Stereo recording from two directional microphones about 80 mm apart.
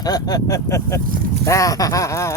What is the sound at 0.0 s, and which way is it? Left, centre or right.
Speech, left.